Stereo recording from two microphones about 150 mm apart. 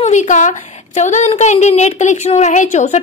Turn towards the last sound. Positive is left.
turn(degrees=50)  # may be behind; listen again after turning